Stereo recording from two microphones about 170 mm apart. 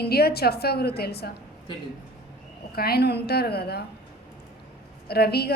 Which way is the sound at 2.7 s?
65° left (ahead or behind).